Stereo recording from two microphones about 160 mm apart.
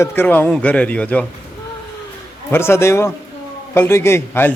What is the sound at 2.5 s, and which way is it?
A man's voice, 15° left (ahead or behind).